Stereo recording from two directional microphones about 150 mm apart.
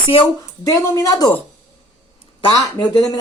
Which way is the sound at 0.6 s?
20° left (ahead or behind).